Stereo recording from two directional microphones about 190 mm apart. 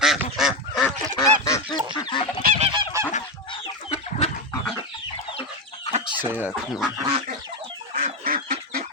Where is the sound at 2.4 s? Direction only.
45° right (ahead or behind).